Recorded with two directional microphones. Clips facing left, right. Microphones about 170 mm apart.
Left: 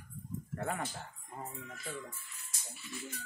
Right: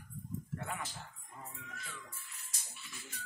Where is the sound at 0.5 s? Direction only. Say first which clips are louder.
Left 7 dB; 45° left (ahead or behind).